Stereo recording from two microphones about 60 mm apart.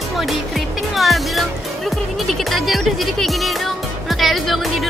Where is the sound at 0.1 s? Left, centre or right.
Centre.